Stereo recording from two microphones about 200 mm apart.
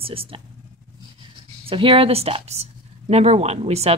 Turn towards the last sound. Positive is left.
turn(degrees=-30)  # may be behind; listen again after turning